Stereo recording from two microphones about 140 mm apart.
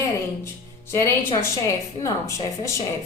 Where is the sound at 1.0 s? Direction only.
20° left (ahead or behind).